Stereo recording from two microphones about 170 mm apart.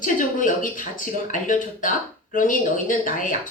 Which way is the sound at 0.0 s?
50° left (ahead or behind).